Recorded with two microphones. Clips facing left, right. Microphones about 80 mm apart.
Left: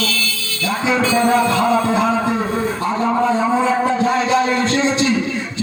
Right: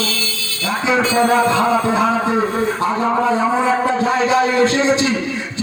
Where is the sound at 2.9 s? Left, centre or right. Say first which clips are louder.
Left 2 dB; centre.